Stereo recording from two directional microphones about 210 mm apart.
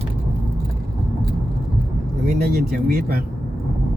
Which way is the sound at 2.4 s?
45° right (ahead or behind).